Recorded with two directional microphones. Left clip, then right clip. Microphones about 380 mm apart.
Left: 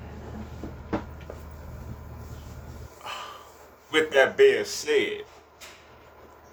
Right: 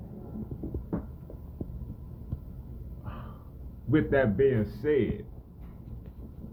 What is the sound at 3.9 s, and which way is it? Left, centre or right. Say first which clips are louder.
Speech: left 5 dB; centre.